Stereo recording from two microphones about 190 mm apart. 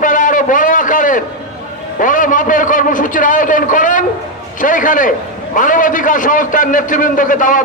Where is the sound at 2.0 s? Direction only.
45° left (ahead or behind).